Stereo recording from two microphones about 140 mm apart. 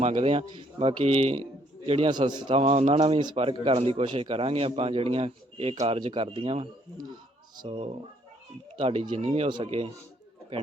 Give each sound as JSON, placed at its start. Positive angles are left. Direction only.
{"t": 0.0, "sound": "a man's voice", "side_deg": -45}
{"t": 2.6, "sound": "a man's voice", "side_deg": -45}
{"t": 7.7, "sound": "a man's voice", "side_deg": -45}